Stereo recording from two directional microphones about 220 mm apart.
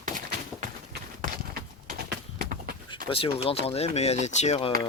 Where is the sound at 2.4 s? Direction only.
40° right (ahead or behind).